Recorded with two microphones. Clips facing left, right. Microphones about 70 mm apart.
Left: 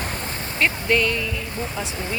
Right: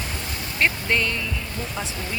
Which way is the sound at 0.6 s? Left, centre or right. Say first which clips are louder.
Left 2 dB; right.